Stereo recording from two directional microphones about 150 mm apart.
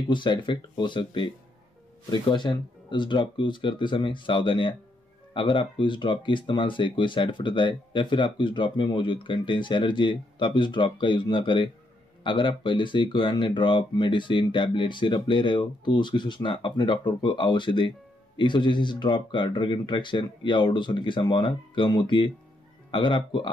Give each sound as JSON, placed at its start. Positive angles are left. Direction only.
{"t": 0.1, "sound": "speech", "side_deg": 30}